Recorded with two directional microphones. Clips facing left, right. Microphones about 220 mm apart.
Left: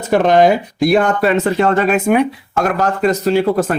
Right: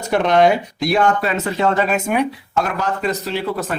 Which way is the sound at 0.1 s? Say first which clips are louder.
Left 3 dB; 45° left (ahead or behind).